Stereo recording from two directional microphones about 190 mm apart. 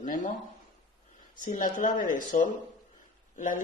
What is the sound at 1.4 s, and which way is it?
Speech, 45° left (ahead or behind).